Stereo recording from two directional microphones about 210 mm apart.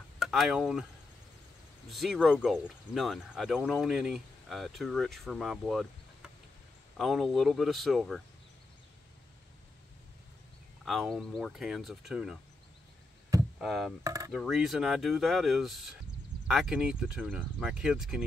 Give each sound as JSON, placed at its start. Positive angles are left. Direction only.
{"t": 0.2, "sound": "speech", "side_deg": 0}
{"t": 1.9, "sound": "speech", "side_deg": 0}
{"t": 10.9, "sound": "speech", "side_deg": 0}
{"t": 13.6, "sound": "speech", "side_deg": 0}
{"t": 14.0, "sound": "speech", "side_deg": -15}
{"t": 14.3, "sound": "speech", "side_deg": 0}